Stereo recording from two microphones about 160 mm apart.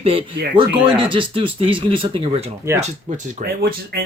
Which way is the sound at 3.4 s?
70° right (ahead or behind).